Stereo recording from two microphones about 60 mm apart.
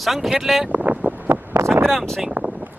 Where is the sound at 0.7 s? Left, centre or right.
Right.